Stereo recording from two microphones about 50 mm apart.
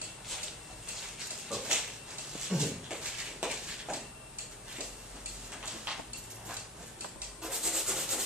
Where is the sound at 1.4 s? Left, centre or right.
Centre.